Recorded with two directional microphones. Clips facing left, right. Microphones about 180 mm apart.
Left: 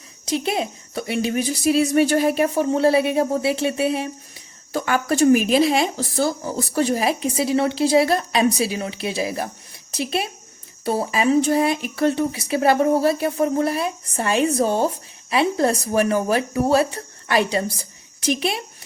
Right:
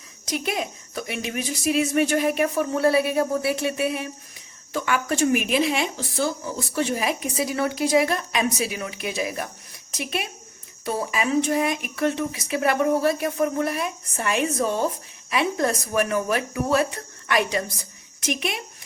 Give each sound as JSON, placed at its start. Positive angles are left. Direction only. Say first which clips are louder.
{"t": 0.3, "sound": "a woman's voice", "louder": "left 4 dB", "side_deg": 30}